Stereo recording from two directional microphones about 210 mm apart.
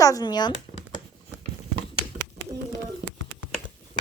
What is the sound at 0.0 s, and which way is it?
Speech, 15° left (ahead or behind).